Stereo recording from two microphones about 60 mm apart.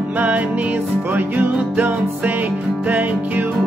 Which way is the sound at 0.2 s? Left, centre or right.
Right.